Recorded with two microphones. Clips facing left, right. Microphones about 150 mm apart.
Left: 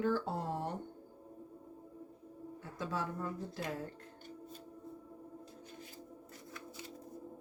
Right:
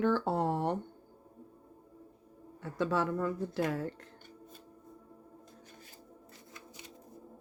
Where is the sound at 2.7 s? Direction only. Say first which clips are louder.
Right 8 dB; 70° right (ahead or behind); by 3.9 s 90° right.